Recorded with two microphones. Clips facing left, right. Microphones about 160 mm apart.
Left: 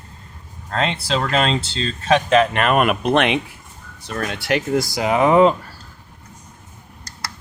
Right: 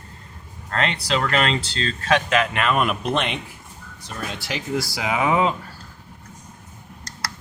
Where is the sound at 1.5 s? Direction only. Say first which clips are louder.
Left 2 dB; 25° left (ahead or behind).